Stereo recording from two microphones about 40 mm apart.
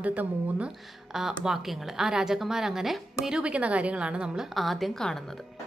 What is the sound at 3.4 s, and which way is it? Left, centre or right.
Speech, right.